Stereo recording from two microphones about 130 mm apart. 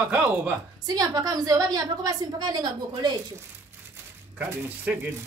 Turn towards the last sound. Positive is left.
turn(degrees=-15)  # may be behind; listen again after turning